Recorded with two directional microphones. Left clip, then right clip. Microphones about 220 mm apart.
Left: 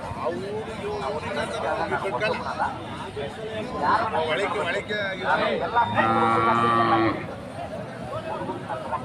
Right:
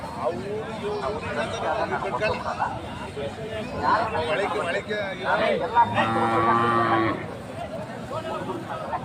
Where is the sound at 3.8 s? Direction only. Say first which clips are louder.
Even; 50° left (ahead or behind).